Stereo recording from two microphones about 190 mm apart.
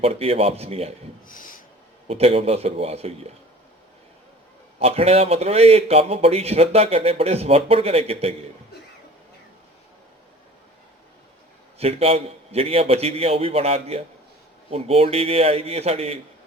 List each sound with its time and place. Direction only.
0.0 s a man's voice: 30° right (ahead or behind)
1.3 s a sound: 45° left (ahead or behind)
2.0 s a man's voice: 35° right (ahead or behind)
4.8 s a man's voice: 30° right (ahead or behind)
11.8 s a man's voice: 30° right (ahead or behind)